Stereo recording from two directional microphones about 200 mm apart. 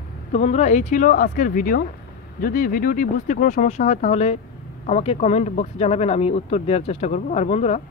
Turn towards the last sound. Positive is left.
turn(degrees=35)  # may be behind; listen again after turning